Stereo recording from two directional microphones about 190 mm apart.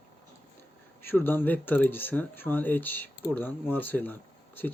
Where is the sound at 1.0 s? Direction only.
10° left (ahead or behind).